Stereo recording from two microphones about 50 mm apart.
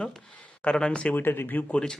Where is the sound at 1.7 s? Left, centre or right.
Left.